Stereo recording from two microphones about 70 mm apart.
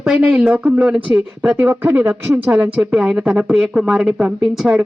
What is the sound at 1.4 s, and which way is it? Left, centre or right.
A woman's voice, right.